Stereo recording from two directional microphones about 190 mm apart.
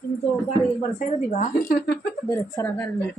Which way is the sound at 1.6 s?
50° left (ahead or behind).